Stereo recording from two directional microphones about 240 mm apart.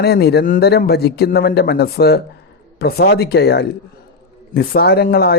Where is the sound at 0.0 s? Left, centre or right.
Left.